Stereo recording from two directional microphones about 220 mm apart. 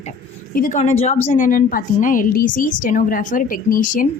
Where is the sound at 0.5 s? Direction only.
35° left (ahead or behind).